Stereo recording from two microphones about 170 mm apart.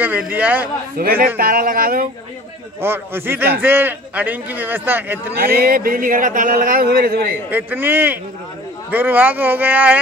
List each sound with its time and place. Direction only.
0.0 s a man's voice: 10° right (ahead or behind)
0.9 s speech: 60° right (ahead or behind)
2.8 s a man's voice: 15° right (ahead or behind)
5.4 s speech: 60° right (ahead or behind)
7.5 s a man's voice: 10° right (ahead or behind)